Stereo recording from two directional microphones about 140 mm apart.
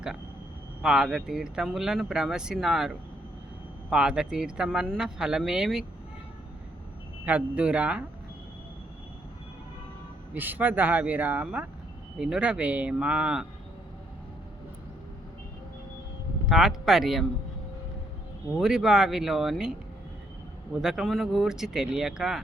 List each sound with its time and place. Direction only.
0.8 s speech: 5° right (ahead or behind)
7.3 s speech: 10° right (ahead or behind)
10.3 s speech: 15° right (ahead or behind)
16.5 s speech: 5° right (ahead or behind)
18.6 s speech: 5° right (ahead or behind)
20.8 s speech: centre (ahead or behind)